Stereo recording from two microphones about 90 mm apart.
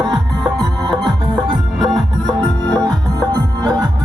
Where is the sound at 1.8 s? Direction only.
Centre (ahead or behind).